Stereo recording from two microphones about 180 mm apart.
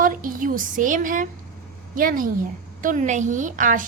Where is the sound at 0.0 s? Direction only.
50° right (ahead or behind).